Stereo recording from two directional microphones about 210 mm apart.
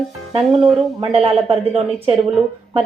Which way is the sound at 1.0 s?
30° right (ahead or behind).